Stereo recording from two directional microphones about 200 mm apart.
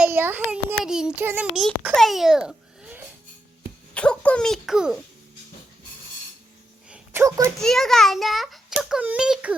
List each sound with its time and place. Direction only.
0.0 s a child's voice: 10° right (ahead or behind)
6.9 s a sound: 15° right (ahead or behind)
7.6 s a child's voice: centre (ahead or behind)